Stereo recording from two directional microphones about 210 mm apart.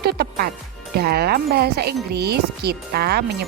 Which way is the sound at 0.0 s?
50° right (ahead or behind).